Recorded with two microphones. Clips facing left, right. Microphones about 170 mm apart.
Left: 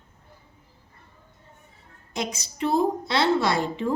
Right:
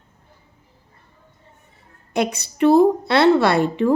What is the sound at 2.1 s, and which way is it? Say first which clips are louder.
A woman's voice: right 9 dB; 60° right (ahead or behind).